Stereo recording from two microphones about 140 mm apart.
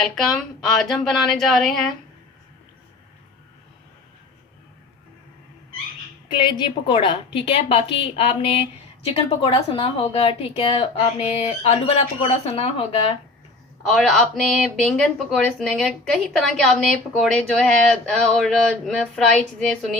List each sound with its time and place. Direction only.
0.2 s speech: centre (ahead or behind)
6.3 s a woman's voice: 35° left (ahead or behind)
13.8 s speech: centre (ahead or behind)